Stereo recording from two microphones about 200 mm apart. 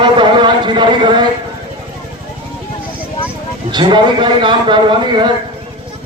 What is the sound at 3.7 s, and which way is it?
A man's voice, 20° right (ahead or behind).